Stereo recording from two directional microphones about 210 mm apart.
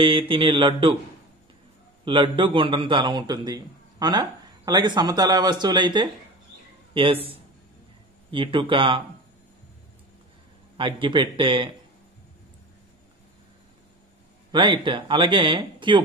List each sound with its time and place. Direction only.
0.0 s a man's voice: 25° right (ahead or behind)
2.0 s a man's voice: 25° right (ahead or behind)
8.3 s a man's voice: 25° right (ahead or behind)
10.8 s a man's voice: 25° right (ahead or behind)
14.5 s a man's voice: 25° right (ahead or behind)